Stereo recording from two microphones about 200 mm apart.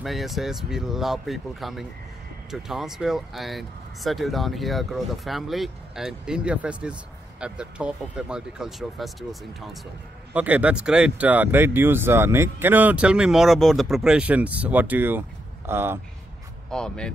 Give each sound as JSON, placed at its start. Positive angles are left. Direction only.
{"t": 0.0, "sound": "speech", "side_deg": 0}
{"t": 16.7, "sound": "speech", "side_deg": 5}